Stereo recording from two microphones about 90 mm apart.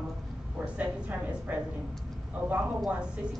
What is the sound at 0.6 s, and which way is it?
Speech, 15° right (ahead or behind).